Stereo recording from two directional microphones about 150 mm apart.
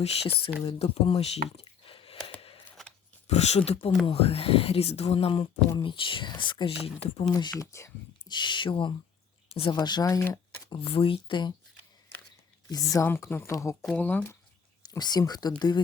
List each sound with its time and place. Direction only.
0.6 s speech: 40° left (ahead or behind)
3.2 s speech: 45° left (ahead or behind); by 8.3 s 20° left (ahead or behind)
8.3 s speech: 30° left (ahead or behind)
9.7 s speech: 25° left (ahead or behind)
10.7 s speech: 35° left (ahead or behind)
12.7 s speech: 20° left (ahead or behind)
14.8 s speech: 25° left (ahead or behind)